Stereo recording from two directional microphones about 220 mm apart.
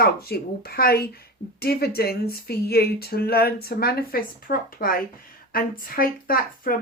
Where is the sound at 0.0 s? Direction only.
45° left (ahead or behind).